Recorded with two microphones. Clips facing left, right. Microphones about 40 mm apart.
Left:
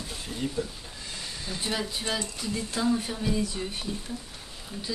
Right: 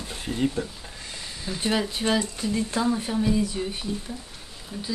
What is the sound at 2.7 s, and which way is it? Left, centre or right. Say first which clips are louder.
Speech: right 1 dB; centre.